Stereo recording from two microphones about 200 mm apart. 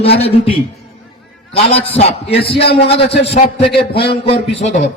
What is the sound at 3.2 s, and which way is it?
A man's voice, 30° left (ahead or behind).